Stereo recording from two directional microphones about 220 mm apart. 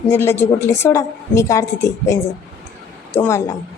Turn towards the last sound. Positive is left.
turn(degrees=10)  # may be behind; listen again after turning